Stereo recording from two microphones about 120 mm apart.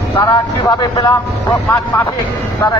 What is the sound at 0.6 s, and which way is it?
Speech, 35° left (ahead or behind).